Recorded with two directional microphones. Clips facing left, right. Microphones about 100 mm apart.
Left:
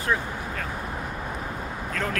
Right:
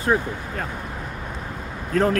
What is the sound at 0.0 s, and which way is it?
Speech, 30° right (ahead or behind).